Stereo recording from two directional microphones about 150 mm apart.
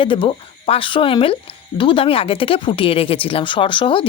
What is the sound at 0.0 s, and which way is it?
Speech, 35° left (ahead or behind).